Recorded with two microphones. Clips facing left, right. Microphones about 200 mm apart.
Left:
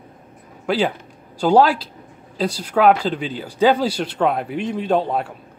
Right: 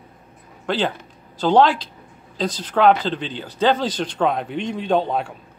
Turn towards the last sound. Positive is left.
turn(degrees=5)  # may be behind; listen again after turning